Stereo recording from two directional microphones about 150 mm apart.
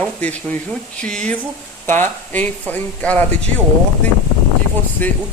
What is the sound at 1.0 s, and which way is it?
A woman's voice, 5° left (ahead or behind).